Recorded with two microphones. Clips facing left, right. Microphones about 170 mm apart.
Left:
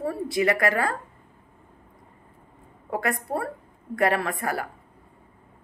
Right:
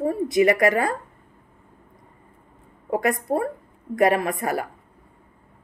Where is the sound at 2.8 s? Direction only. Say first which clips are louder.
Right 5 dB; 20° right (ahead or behind).